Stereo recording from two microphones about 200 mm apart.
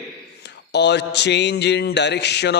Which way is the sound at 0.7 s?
60° left (ahead or behind).